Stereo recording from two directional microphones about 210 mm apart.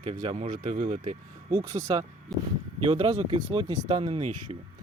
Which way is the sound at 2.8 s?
25° right (ahead or behind).